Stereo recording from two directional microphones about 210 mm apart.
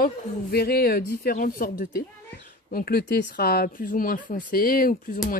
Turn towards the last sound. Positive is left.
turn(degrees=40)  # may be behind; listen again after turning